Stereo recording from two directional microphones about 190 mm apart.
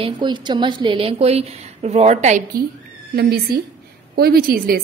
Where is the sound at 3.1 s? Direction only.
55° right (ahead or behind).